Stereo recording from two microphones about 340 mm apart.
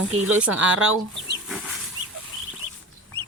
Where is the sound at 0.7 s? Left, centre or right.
Right.